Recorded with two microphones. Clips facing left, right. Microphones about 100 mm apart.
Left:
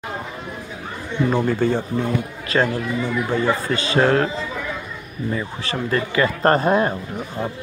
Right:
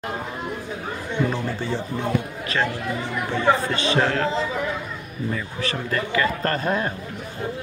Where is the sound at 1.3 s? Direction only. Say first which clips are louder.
Left 7 dB; 50° left (ahead or behind).